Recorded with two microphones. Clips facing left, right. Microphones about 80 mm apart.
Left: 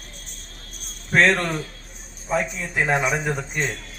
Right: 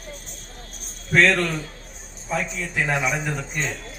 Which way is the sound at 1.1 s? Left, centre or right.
Left.